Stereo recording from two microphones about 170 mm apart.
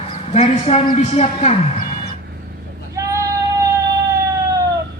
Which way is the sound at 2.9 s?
15° right (ahead or behind).